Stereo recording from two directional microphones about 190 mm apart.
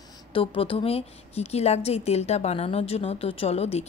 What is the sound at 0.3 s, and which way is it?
A woman's voice, 30° left (ahead or behind).